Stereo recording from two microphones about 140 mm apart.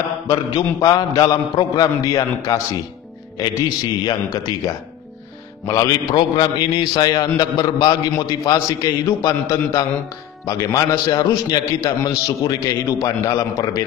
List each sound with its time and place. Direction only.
0.3 s a man's voice: 25° left (ahead or behind)